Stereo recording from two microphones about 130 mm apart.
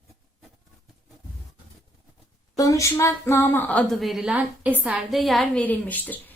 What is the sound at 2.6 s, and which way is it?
A woman's voice, 25° left (ahead or behind).